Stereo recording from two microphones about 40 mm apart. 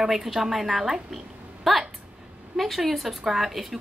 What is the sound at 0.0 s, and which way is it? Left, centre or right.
A woman's voice, centre.